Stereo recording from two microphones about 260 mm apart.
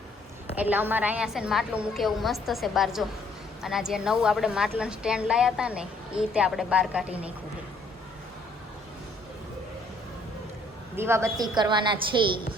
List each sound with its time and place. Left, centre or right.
0.5 s a woman's voice: centre
10.9 s a woman's voice: centre